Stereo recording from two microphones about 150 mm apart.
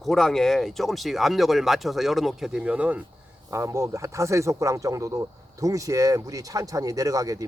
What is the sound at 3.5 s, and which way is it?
Speech, 20° right (ahead or behind).